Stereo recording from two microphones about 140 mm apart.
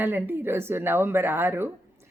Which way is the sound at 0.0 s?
15° right (ahead or behind).